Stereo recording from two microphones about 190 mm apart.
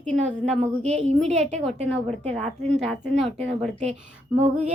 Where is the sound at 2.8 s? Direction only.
Centre (ahead or behind).